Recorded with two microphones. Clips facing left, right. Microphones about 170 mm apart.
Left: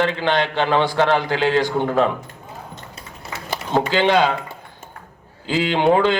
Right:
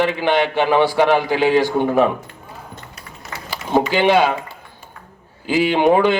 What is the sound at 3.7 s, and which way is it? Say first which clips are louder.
Speech: right 2 dB; 15° right (ahead or behind).